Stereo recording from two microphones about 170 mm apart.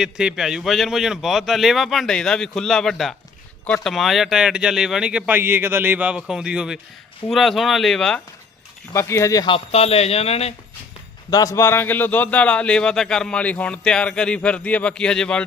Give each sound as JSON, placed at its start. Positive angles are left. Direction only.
{"t": 0.0, "sound": "speech", "side_deg": -5}
{"t": 8.9, "sound": "speech", "side_deg": 15}
{"t": 9.7, "sound": "speech", "side_deg": 40}
{"t": 11.3, "sound": "speech", "side_deg": 20}